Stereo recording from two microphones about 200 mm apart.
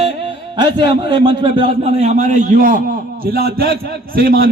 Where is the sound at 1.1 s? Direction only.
25° right (ahead or behind); by 4.4 s 50° right (ahead or behind).